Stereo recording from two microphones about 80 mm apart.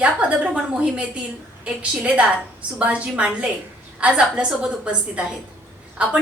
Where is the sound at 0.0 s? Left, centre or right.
Centre.